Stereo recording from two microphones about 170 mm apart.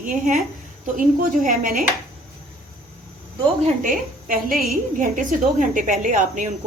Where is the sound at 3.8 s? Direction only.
55° right (ahead or behind).